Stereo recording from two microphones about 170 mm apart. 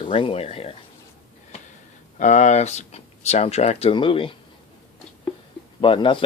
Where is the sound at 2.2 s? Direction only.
45° left (ahead or behind).